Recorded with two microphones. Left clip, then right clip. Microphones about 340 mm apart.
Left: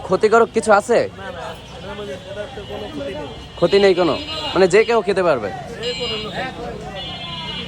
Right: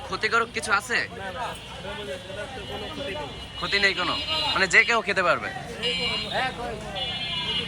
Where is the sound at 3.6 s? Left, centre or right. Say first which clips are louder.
Left 9 dB; centre.